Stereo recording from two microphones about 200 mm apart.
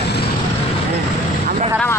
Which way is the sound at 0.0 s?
55° left (ahead or behind).